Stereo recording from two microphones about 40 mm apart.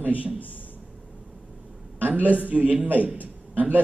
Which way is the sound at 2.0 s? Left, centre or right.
Right.